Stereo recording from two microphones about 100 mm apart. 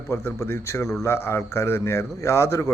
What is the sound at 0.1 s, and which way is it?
A man's voice, 25° left (ahead or behind).